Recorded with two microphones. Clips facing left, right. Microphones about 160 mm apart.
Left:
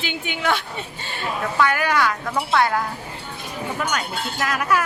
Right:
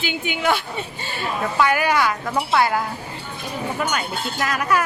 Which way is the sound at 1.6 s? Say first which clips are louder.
Right 1 dB; 10° right (ahead or behind).